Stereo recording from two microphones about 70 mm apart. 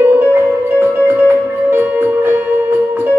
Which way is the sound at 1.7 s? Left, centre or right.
Right.